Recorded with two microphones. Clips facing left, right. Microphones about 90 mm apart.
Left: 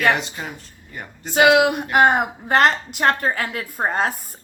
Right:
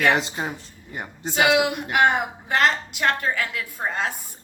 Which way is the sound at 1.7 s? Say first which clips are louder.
Left 4 dB; 40° left (ahead or behind).